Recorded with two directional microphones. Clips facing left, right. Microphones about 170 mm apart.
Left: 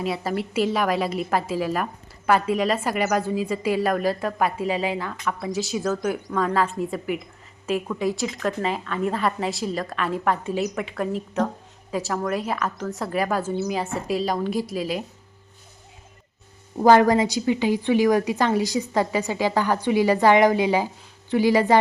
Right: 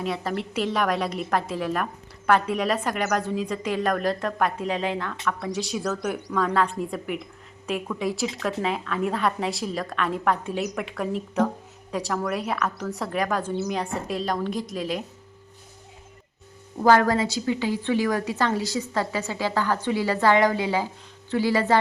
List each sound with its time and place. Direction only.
0.0 s a woman's voice: 5° left (ahead or behind)
16.8 s a woman's voice: 20° left (ahead or behind)